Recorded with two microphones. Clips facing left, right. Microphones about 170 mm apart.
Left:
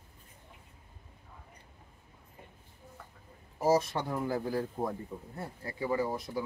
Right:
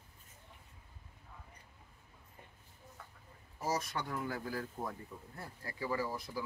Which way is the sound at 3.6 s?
30° left (ahead or behind).